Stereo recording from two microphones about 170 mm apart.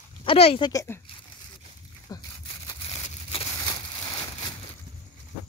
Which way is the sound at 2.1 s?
20° left (ahead or behind).